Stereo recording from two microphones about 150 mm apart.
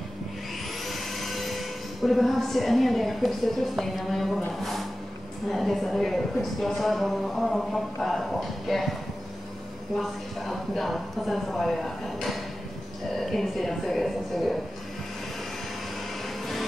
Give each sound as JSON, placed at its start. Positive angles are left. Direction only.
{"t": 0.8, "sound": "speech", "side_deg": 0}
{"t": 5.5, "sound": "speech", "side_deg": 0}
{"t": 9.9, "sound": "speech", "side_deg": 0}